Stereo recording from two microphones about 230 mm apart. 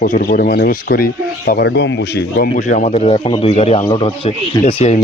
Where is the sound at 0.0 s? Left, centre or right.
Left.